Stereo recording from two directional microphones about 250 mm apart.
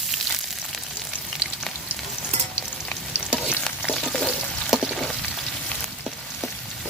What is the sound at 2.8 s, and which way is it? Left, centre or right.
Stir, centre.